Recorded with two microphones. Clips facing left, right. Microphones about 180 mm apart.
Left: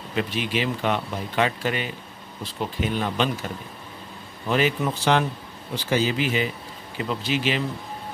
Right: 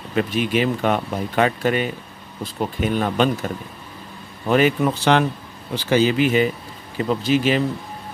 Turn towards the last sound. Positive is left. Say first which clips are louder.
# right 7 dB
turn(degrees=-45)  # may be behind; listen again after turning